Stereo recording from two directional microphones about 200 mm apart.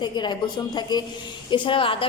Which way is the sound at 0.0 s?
20° left (ahead or behind).